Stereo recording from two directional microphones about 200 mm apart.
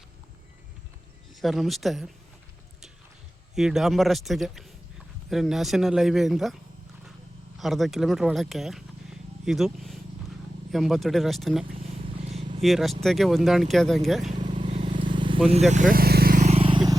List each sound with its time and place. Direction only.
1.4 s speech: centre (ahead or behind)
3.5 s a man's voice: centre (ahead or behind)
7.6 s speech: centre (ahead or behind)
12.0 s vehicle: 25° right (ahead or behind)
12.6 s speech: centre (ahead or behind)
14.3 s vehicle: 35° right (ahead or behind)
14.6 s vehicle: 25° right (ahead or behind)